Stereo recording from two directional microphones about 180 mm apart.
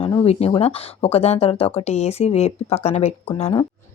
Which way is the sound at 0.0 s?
25° left (ahead or behind).